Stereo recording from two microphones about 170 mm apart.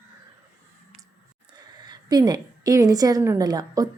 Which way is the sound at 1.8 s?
25° right (ahead or behind).